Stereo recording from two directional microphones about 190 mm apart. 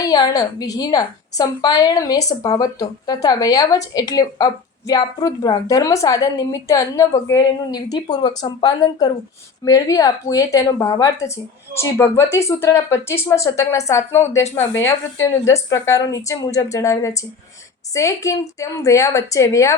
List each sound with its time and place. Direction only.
0.0 s a woman's voice: 20° left (ahead or behind)